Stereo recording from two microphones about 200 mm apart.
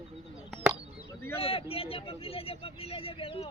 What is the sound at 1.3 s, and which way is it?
Speech, 30° left (ahead or behind).